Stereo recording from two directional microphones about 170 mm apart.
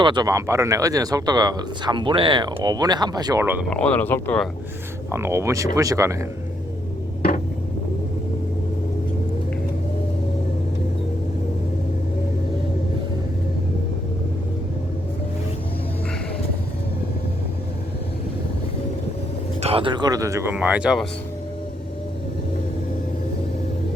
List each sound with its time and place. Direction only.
0.0 s speech: 25° right (ahead or behind)
3.7 s speech: 5° left (ahead or behind)
5.1 s speech: 15° right (ahead or behind)
19.6 s speech: 30° right (ahead or behind); by 21.1 s 5° right (ahead or behind)